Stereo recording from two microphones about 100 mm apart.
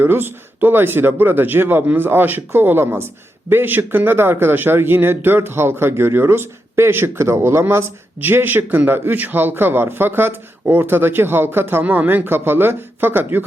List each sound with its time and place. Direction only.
0.0 s speech: 20° right (ahead or behind)